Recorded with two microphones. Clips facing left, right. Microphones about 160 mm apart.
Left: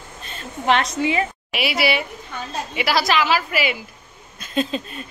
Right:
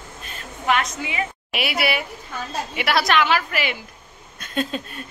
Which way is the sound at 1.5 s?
Centre (ahead or behind).